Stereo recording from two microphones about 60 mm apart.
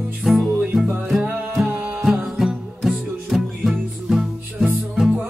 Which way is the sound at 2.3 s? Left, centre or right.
Centre.